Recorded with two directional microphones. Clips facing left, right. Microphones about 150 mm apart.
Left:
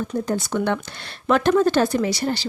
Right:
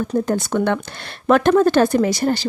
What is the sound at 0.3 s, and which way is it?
Speech, 55° right (ahead or behind).